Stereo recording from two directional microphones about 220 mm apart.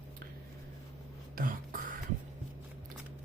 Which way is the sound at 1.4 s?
40° right (ahead or behind).